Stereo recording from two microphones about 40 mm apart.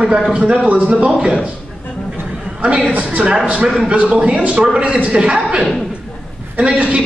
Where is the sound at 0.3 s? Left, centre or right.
Right.